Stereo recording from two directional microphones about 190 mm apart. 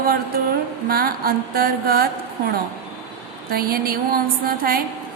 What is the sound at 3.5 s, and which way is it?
Mantra, 50° right (ahead or behind).